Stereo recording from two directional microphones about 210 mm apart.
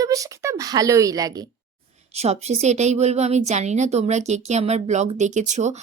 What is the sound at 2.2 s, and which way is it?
A woman's voice, 30° right (ahead or behind).